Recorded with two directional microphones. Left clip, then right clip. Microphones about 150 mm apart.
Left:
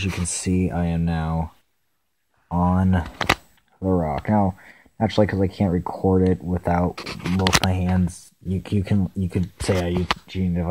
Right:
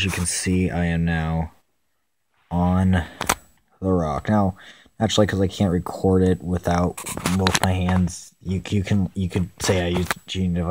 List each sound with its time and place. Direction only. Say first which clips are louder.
0.3 s speech: right 1 dB; 5° right (ahead or behind)
3.8 s speech: even; 20° right (ahead or behind)
7.3 s speech: left 2 dB; 5° right (ahead or behind); by 10.7 s 20° right (ahead or behind)